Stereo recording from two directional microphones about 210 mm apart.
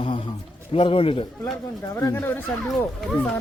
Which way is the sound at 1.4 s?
15° left (ahead or behind).